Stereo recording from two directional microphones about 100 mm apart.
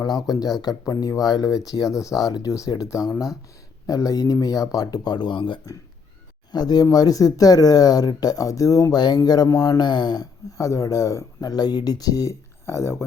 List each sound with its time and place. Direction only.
0.3 s speech: 40° left (ahead or behind); by 5.5 s 55° left (ahead or behind)
6.5 s speech: 45° left (ahead or behind); by 13.1 s 25° left (ahead or behind)